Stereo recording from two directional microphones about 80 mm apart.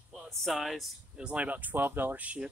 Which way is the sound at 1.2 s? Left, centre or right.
Centre.